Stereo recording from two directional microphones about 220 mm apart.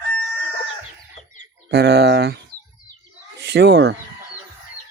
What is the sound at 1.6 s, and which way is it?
Speech, 50° right (ahead or behind).